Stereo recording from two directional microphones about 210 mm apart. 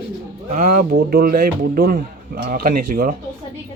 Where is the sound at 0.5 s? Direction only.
40° right (ahead or behind).